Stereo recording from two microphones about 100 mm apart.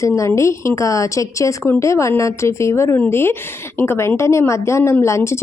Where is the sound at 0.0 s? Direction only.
30° left (ahead or behind).